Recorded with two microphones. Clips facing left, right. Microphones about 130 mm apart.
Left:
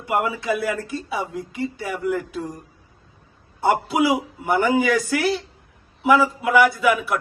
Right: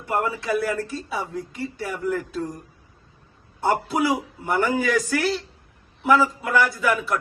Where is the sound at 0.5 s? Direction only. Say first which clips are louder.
Right 2 dB; 5° left (ahead or behind).